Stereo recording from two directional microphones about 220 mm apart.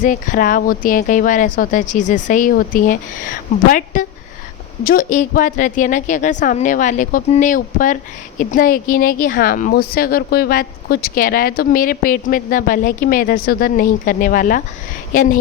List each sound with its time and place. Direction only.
0.0 s speech: 35° left (ahead or behind)